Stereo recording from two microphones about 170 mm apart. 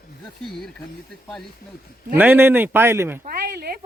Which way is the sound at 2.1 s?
10° right (ahead or behind).